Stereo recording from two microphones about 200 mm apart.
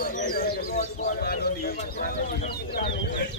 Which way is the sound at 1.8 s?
40° left (ahead or behind).